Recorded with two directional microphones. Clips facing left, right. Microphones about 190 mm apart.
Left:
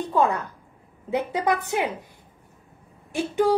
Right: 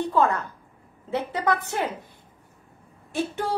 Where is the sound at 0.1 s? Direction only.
15° left (ahead or behind).